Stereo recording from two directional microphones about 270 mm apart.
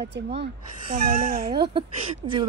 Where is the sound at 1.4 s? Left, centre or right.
Centre.